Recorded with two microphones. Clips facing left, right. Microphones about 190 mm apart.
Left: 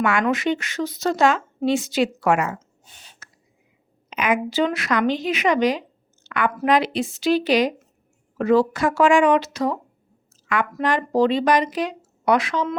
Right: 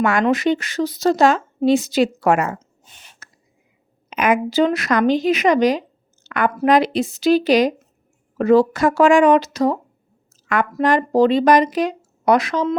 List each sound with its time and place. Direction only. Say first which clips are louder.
0.0 s speech: right 4 dB; 40° right (ahead or behind)
3.2 s whispering: right 2 dB; 40° right (ahead or behind)
4.1 s speech: right 4 dB; 45° right (ahead or behind)
6.2 s a sound: right 3 dB; 40° right (ahead or behind)
6.7 s speech: right 4 dB; 40° right (ahead or behind)